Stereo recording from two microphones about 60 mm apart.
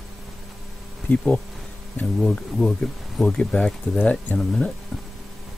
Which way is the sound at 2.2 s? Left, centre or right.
Centre.